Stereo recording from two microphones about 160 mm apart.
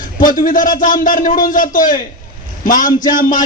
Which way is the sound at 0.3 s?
60° left (ahead or behind).